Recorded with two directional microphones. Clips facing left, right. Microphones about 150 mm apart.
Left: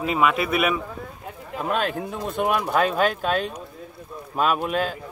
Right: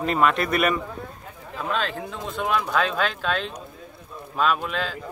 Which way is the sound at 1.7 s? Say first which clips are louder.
Left 3 dB; 50° left (ahead or behind).